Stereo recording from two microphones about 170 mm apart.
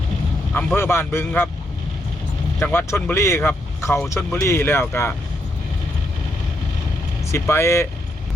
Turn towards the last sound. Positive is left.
turn(degrees=15)  # may be behind; listen again after turning